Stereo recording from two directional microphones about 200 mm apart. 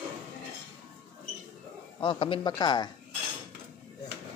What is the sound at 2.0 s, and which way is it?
Speech, 25° left (ahead or behind).